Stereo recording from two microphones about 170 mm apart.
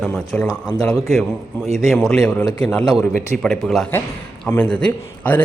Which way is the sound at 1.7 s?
Centre (ahead or behind).